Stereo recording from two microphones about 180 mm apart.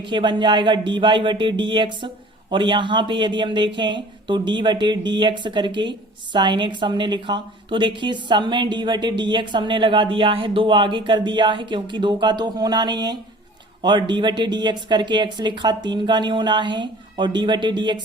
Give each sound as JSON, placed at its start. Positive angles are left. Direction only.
{"t": 0.0, "sound": "a woman's voice", "side_deg": -25}